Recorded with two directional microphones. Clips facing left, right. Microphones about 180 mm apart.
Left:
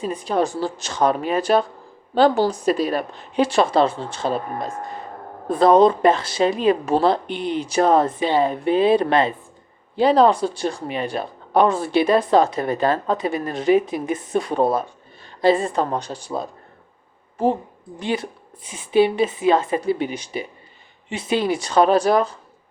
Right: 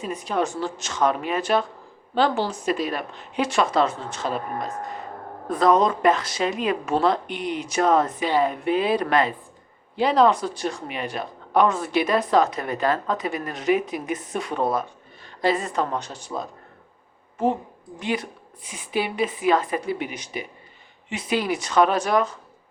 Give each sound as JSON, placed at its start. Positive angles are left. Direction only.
{"t": 0.0, "sound": "a woman's voice", "side_deg": 30}